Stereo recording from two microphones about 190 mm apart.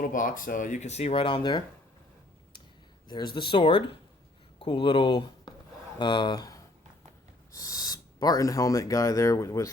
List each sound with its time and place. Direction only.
0.0 s speech: 45° left (ahead or behind); by 1.6 s 25° left (ahead or behind)
3.3 s speech: 25° left (ahead or behind)